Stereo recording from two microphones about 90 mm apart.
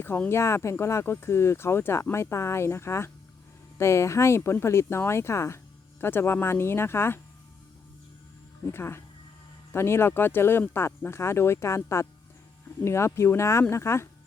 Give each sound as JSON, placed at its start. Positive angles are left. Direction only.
{"t": 0.3, "sound": "speech", "side_deg": 30}
{"t": 8.6, "sound": "speech", "side_deg": 25}